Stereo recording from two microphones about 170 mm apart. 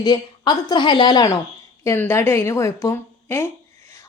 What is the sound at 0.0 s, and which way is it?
A woman's voice, 25° left (ahead or behind).